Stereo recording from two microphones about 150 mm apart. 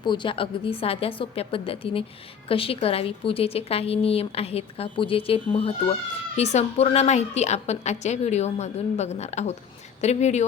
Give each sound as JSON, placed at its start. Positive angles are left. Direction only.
{"t": 0.0, "sound": "a woman's voice", "side_deg": 30}